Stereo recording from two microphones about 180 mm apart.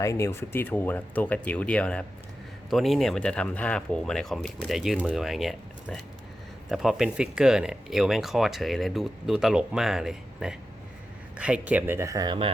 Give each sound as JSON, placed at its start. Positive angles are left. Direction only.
{"t": 0.0, "sound": "speech", "side_deg": 15}